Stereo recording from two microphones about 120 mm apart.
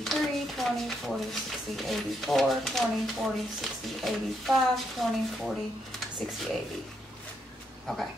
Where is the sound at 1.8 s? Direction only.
Centre (ahead or behind).